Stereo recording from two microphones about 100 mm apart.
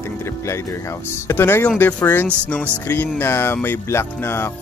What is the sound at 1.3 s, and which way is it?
Speech, 25° left (ahead or behind).